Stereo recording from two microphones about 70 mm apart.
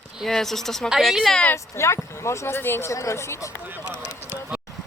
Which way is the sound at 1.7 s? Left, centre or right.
Left.